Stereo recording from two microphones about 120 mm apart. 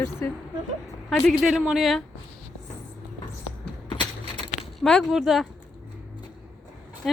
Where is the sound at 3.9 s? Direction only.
45° left (ahead or behind).